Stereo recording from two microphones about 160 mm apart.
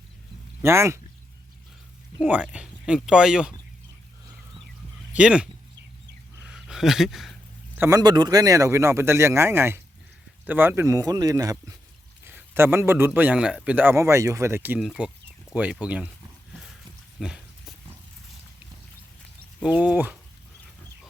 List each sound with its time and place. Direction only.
0.6 s speech: 15° right (ahead or behind)
2.2 s speech: 10° right (ahead or behind)
5.1 s speech: 5° right (ahead or behind)
6.5 s a sound: 5° right (ahead or behind)
7.8 s speech: 20° right (ahead or behind)
12.2 s a sound: 15° right (ahead or behind)
13.1 s speech: 10° right (ahead or behind)
14.8 s speech: 5° right (ahead or behind)
17.2 s a sound: centre (ahead or behind)
19.6 s speech: 10° right (ahead or behind)